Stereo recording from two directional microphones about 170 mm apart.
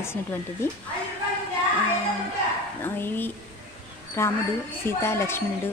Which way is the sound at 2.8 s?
10° left (ahead or behind).